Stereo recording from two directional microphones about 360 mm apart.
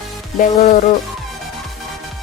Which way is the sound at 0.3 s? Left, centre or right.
Left.